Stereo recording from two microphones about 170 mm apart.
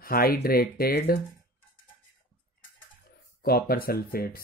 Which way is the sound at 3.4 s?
65° left (ahead or behind).